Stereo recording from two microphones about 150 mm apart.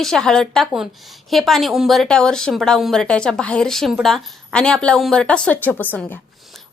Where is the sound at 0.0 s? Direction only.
5° left (ahead or behind).